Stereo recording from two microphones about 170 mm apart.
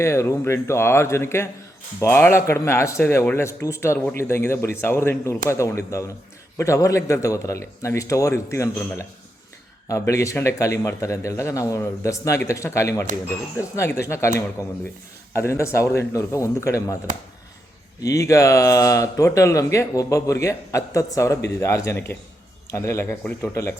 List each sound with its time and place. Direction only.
0.0 s a man's voice: 15° left (ahead or behind)
9.9 s a man's voice: 20° left (ahead or behind)
18.0 s a man's voice: 20° left (ahead or behind)